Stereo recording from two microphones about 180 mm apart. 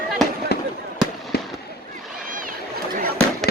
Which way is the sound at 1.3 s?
60° left (ahead or behind).